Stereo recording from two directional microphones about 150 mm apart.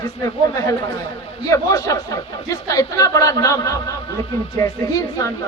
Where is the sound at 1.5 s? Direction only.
20° left (ahead or behind).